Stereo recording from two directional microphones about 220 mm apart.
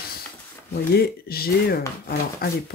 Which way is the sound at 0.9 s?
45° left (ahead or behind).